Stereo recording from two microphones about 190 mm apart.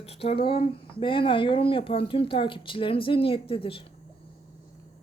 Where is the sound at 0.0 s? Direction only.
30° left (ahead or behind).